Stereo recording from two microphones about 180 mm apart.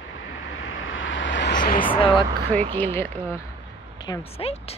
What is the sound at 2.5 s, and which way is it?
Speech, 10° left (ahead or behind).